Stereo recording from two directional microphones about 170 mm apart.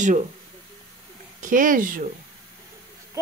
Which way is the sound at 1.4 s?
50° right (ahead or behind).